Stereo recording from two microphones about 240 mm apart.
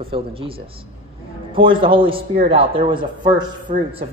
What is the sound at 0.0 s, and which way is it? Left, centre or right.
A man's voice, right.